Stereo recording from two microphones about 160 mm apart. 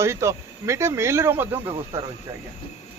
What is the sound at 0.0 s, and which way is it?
Speech, 15° right (ahead or behind).